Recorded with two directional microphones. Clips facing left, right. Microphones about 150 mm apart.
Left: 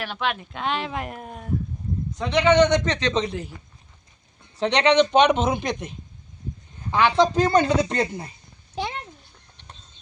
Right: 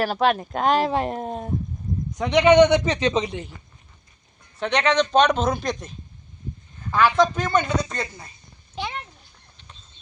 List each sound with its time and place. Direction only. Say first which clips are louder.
0.0 s speech: right 7 dB; 40° right (ahead or behind)
2.1 s a man's voice: right 3 dB; 15° right (ahead or behind)
4.4 s speech: left 2 dB; 25° left (ahead or behind)
7.1 s speech: left 2 dB; 30° left (ahead or behind)